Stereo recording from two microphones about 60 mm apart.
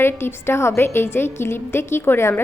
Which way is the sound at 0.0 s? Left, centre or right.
Left.